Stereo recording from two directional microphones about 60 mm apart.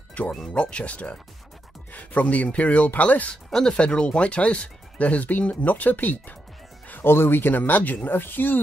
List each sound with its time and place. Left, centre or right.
0.2 s speech: left
3.4 s speech: centre; by 8.5 s left